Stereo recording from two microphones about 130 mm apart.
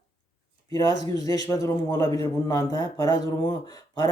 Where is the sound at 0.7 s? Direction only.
30° left (ahead or behind).